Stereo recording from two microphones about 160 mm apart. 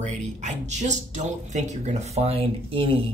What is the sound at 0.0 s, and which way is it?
Speech, 50° right (ahead or behind).